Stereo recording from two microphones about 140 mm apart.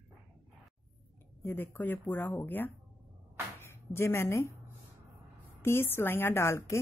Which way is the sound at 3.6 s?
20° left (ahead or behind).